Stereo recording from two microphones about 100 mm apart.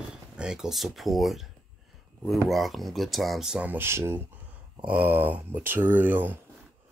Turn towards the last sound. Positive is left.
turn(degrees=-20)  # may be behind; listen again after turning